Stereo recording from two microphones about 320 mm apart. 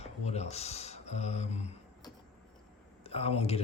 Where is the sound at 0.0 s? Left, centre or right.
Centre.